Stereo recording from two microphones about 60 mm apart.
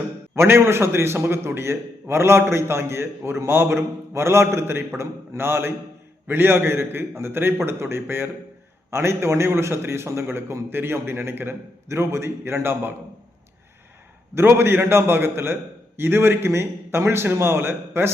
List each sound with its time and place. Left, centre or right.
0.3 s a man's voice: right
14.3 s a man's voice: right